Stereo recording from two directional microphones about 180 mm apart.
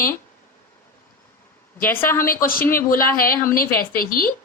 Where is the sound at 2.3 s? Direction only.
50° left (ahead or behind).